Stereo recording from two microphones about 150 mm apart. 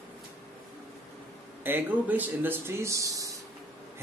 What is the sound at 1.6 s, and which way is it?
Speech, 10° right (ahead or behind).